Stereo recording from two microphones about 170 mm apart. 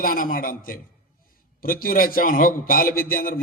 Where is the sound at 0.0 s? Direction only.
55° left (ahead or behind).